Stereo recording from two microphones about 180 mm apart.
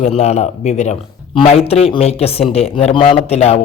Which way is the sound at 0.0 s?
35° left (ahead or behind).